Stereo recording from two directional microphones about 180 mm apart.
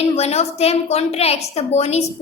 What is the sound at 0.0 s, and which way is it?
A woman's voice, 35° left (ahead or behind).